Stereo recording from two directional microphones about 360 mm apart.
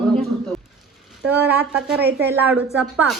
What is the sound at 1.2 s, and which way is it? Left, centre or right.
A woman's voice, centre.